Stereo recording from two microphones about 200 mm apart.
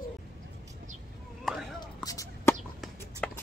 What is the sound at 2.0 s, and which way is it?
Chicken, 15° left (ahead or behind).